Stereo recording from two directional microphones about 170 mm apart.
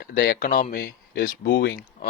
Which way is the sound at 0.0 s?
60° left (ahead or behind).